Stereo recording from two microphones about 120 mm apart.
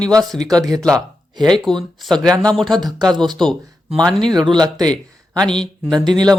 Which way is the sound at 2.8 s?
35° right (ahead or behind).